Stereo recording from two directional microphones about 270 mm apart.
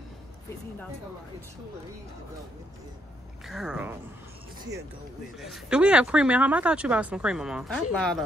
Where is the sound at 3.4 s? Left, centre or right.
Centre.